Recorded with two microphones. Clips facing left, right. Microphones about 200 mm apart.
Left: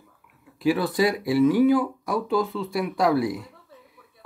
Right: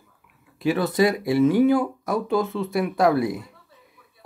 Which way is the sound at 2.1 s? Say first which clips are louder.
Right 1 dB; 25° right (ahead or behind).